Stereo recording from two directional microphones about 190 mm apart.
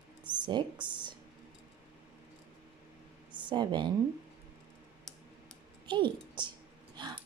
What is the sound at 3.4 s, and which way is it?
Speech, 25° right (ahead or behind).